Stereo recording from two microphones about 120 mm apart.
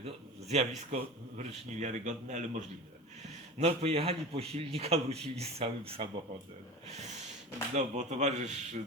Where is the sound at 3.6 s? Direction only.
60° right (ahead or behind).